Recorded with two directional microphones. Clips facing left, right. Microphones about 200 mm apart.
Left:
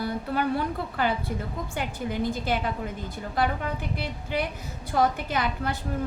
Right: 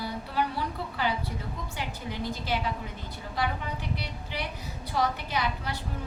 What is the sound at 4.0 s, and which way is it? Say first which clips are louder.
A woman's voice: left 7 dB; 50° left (ahead or behind).